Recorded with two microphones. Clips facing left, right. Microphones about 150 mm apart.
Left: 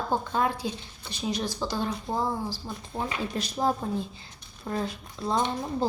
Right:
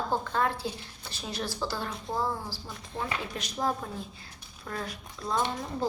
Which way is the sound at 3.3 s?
30° left (ahead or behind).